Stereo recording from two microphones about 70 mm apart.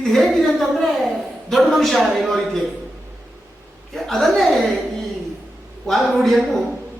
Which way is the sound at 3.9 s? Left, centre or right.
Centre.